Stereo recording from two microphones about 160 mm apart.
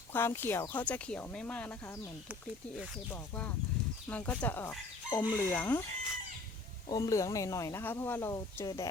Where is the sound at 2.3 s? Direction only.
10° right (ahead or behind).